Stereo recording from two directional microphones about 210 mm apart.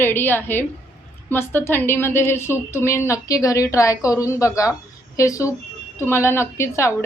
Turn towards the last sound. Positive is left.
turn(degrees=15)  # may be behind; listen again after turning